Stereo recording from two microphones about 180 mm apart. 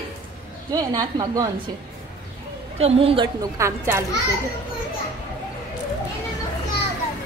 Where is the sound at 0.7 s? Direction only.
20° right (ahead or behind).